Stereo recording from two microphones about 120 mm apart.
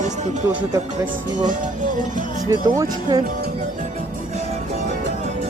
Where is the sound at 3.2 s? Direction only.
90° right.